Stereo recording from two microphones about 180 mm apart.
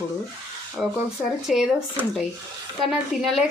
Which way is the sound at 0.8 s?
5° right (ahead or behind).